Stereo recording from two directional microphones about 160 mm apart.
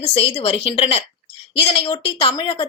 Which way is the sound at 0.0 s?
35° left (ahead or behind).